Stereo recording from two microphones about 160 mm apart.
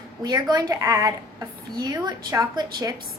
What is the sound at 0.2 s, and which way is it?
A woman's voice, 25° right (ahead or behind).